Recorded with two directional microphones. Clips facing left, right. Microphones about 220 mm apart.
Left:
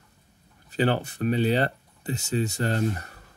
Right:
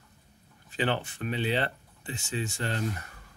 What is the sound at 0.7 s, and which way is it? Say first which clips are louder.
Speech: left 5 dB; 40° left (ahead or behind).